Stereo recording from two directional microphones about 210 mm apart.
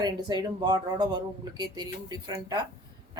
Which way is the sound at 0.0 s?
20° right (ahead or behind).